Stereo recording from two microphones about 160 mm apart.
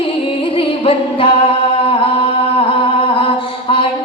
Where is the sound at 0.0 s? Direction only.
35° left (ahead or behind).